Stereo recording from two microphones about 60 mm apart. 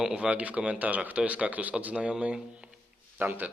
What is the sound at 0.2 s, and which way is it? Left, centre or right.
Speech, right.